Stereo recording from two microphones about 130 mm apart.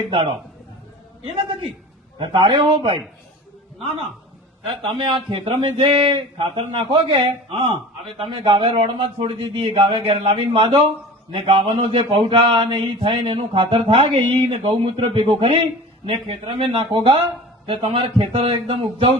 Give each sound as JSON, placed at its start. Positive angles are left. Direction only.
{"t": 0.1, "sound": "speech", "side_deg": -45}
{"t": 4.8, "sound": "speech", "side_deg": -40}